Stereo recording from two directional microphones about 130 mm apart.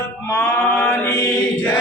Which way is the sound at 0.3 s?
10° left (ahead or behind).